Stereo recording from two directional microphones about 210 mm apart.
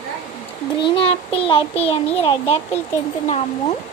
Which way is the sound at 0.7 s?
25° left (ahead or behind).